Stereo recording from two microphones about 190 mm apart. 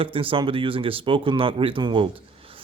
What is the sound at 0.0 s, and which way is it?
Speech, 30° right (ahead or behind).